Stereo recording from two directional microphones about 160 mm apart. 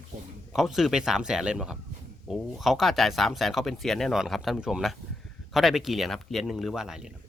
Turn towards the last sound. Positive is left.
turn(degrees=-5)  # may be behind; listen again after turning